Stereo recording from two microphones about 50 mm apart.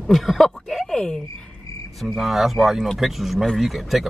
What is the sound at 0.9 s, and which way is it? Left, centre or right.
Speech, centre.